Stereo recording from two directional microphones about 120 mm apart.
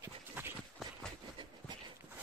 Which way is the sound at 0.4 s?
15° right (ahead or behind).